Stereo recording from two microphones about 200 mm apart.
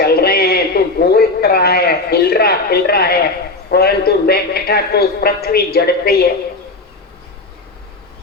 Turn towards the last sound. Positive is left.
turn(degrees=50)  # may be behind; listen again after turning